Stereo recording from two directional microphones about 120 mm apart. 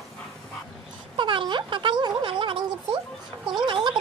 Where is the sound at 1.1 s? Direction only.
40° right (ahead or behind).